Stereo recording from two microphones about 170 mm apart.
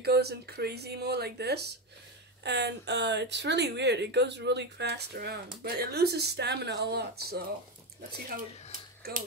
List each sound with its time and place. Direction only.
0.0 s speech: 70° right (ahead or behind)
2.4 s speech: 90° right; by 7.4 s 65° right (ahead or behind)